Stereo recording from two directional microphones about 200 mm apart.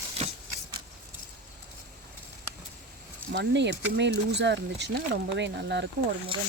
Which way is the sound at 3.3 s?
60° right (ahead or behind).